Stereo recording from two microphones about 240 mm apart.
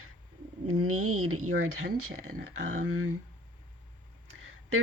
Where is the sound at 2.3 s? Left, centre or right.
Right.